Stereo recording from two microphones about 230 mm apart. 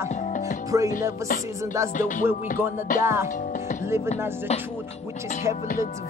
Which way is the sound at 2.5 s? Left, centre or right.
Centre.